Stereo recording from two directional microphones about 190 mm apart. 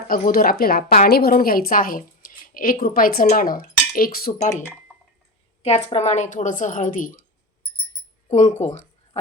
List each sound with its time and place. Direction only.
0.1 s a woman's voice: 50° left (ahead or behind)
4.4 s speech: 15° left (ahead or behind)
5.6 s a woman's voice: 35° left (ahead or behind)
8.3 s a woman's voice: 40° left (ahead or behind)